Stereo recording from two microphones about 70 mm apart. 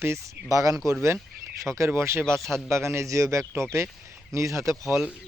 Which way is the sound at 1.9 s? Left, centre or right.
Right.